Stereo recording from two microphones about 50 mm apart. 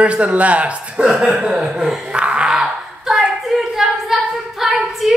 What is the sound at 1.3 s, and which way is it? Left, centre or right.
Speech, centre.